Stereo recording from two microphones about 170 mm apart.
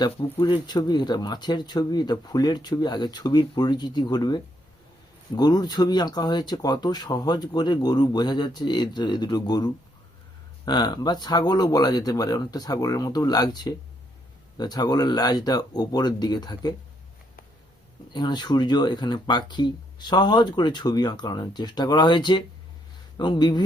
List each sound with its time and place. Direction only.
0.0 s speech: 25° left (ahead or behind)
18.1 s speech: 25° left (ahead or behind)